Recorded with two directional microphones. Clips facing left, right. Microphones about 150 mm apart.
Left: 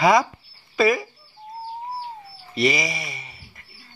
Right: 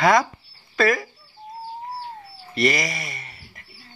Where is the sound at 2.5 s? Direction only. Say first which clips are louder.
Even; centre (ahead or behind).